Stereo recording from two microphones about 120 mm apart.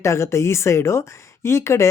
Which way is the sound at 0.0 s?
25° left (ahead or behind).